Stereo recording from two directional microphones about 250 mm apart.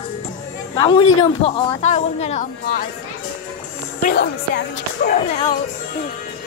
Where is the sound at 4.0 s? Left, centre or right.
Left.